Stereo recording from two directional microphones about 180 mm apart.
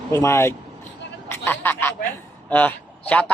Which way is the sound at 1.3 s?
15° left (ahead or behind).